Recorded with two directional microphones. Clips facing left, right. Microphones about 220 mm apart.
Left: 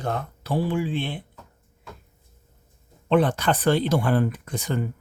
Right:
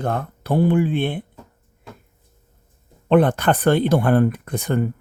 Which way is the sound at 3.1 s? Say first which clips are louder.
Right 4 dB; 55° right (ahead or behind).